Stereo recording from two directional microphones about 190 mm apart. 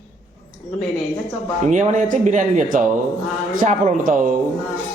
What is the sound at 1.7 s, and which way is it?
A man's voice, 40° right (ahead or behind).